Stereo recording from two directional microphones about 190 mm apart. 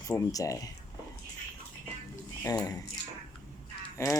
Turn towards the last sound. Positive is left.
turn(degrees=15)  # may be behind; listen again after turning